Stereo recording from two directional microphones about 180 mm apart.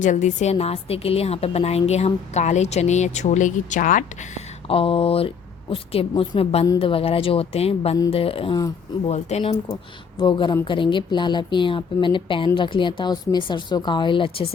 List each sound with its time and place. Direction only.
0.0 s a woman's voice: 40° left (ahead or behind); by 8.7 s 25° left (ahead or behind)
9.0 s a woman's voice: 35° left (ahead or behind)